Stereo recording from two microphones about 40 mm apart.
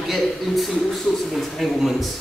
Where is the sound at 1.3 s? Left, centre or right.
Centre.